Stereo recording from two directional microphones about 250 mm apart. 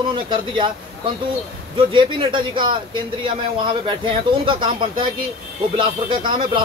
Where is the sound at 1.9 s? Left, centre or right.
Centre.